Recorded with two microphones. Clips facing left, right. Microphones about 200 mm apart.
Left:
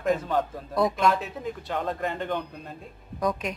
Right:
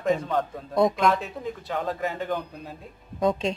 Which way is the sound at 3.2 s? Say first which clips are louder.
Right 4 dB; 25° right (ahead or behind).